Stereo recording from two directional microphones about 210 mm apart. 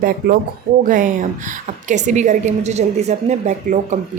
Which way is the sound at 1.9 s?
35° right (ahead or behind).